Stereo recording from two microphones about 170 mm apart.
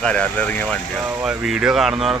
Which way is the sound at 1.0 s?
5° right (ahead or behind).